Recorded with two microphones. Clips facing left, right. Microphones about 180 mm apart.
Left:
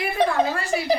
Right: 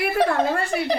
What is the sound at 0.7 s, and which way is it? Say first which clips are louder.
Speech: left 1 dB; 5° left (ahead or behind).